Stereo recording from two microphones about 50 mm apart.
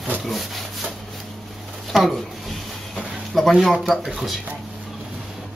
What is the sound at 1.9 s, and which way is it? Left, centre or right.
Speech, centre.